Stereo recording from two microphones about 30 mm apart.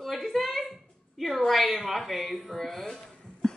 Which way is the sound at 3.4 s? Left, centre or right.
Centre.